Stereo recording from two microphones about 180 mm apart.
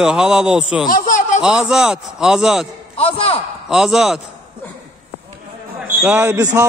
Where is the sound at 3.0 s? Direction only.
35° left (ahead or behind).